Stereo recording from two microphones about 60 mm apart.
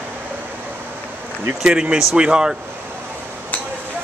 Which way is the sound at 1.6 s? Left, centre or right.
Centre.